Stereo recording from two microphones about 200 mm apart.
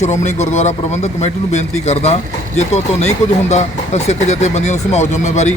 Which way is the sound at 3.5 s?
35° left (ahead or behind).